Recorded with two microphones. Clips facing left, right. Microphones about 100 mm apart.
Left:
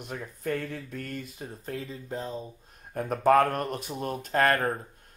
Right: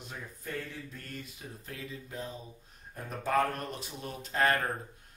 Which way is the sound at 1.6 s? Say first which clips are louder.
Left 7 dB; 35° left (ahead or behind).